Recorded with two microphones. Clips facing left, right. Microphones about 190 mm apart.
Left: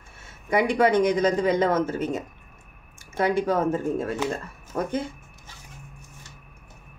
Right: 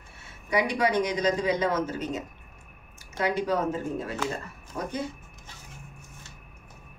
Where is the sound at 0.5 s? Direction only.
50° left (ahead or behind).